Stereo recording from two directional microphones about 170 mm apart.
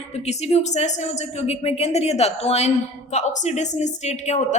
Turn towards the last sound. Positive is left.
turn(degrees=40)  # may be behind; listen again after turning